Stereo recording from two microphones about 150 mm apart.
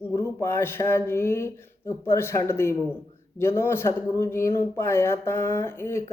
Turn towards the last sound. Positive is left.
turn(degrees=15)  # may be behind; listen again after turning